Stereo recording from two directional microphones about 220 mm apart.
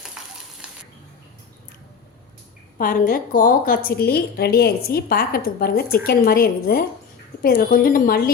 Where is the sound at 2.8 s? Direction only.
40° left (ahead or behind).